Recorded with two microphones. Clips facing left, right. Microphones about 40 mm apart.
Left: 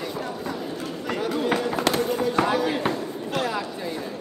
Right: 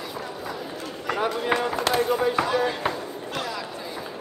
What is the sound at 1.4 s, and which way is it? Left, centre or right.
Run, centre.